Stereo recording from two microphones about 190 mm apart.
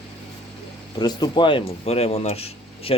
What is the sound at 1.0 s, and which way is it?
Speech, 20° left (ahead or behind).